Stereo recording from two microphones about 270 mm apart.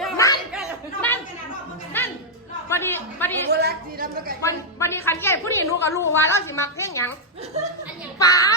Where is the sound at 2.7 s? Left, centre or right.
Centre.